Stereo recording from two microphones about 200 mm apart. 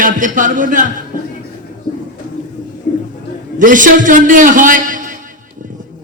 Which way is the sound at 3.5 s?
40° right (ahead or behind).